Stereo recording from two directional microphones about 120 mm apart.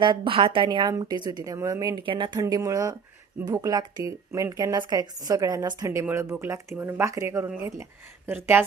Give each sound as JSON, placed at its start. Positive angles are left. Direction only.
{"t": 0.0, "sound": "a woman's voice", "side_deg": -45}
{"t": 2.0, "sound": "a woman's voice", "side_deg": -40}
{"t": 2.4, "sound": "a woman's voice", "side_deg": -30}